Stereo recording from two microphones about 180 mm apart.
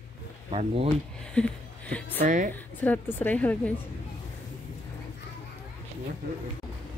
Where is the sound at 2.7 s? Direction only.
10° left (ahead or behind).